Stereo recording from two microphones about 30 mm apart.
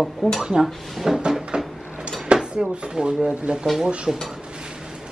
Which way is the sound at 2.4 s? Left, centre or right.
Right.